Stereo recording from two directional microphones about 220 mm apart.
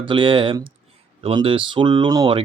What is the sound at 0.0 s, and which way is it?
Speech, 20° right (ahead or behind).